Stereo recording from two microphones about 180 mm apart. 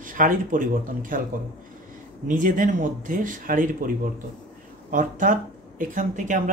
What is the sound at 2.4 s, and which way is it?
Speech, 45° right (ahead or behind).